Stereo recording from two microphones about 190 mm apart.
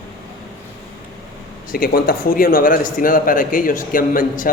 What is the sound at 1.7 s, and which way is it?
A man's voice, 50° left (ahead or behind).